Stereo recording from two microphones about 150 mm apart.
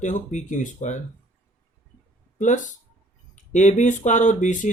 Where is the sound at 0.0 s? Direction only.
55° left (ahead or behind).